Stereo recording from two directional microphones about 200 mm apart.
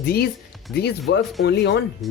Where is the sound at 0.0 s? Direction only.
50° left (ahead or behind).